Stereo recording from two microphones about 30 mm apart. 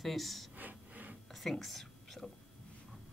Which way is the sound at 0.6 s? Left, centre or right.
Right.